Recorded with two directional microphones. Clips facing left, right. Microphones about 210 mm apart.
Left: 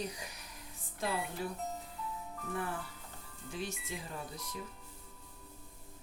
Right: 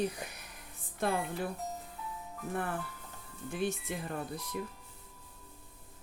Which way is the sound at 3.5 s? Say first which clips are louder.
Right 7 dB; 55° right (ahead or behind).